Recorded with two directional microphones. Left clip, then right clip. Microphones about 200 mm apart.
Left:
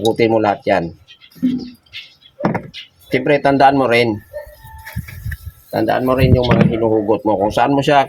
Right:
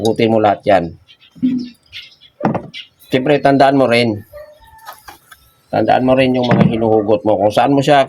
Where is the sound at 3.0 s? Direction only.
45° right (ahead or behind).